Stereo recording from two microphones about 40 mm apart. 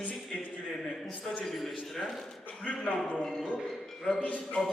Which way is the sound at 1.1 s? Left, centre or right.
Left.